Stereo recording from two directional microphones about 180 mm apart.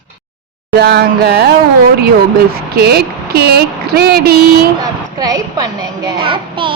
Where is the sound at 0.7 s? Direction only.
60° right (ahead or behind).